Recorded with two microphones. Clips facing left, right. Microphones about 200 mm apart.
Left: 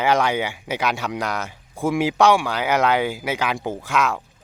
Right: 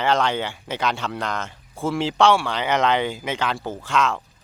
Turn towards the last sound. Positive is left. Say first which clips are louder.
# even
turn(degrees=10)  # may be behind; listen again after turning